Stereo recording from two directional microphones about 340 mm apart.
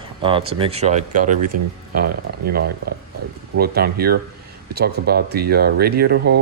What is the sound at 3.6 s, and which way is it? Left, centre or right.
Speech, right.